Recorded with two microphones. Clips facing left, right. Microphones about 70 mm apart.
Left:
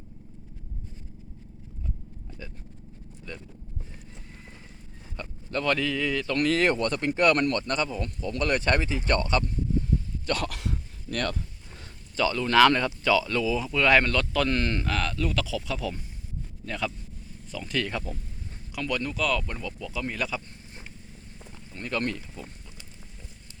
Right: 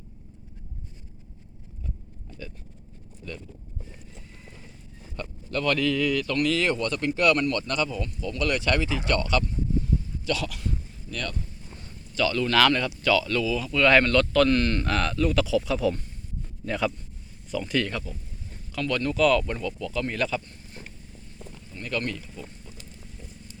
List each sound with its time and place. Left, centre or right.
5.5 s speech: left
6.3 s speech: left
10.2 s speech: left
10.6 s dog: left
12.1 s speech: left
14.8 s speech: centre
18.7 s speech: centre
21.5 s a sound: left